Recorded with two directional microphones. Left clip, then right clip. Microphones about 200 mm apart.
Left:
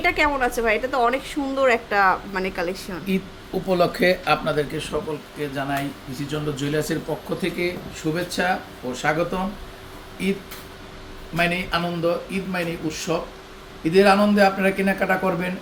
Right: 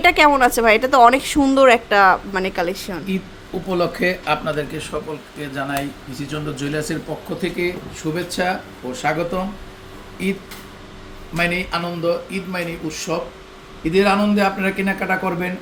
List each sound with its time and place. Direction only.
0.0 s a woman's voice: 25° right (ahead or behind)
3.7 s a man's voice: 15° left (ahead or behind); by 13.1 s 5° right (ahead or behind)
13.8 s a man's voice: 10° left (ahead or behind)